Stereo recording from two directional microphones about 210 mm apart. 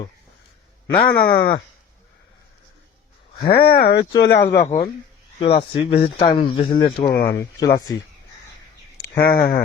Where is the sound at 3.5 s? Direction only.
45° left (ahead or behind).